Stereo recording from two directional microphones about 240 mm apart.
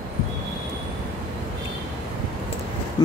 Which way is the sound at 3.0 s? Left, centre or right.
Centre.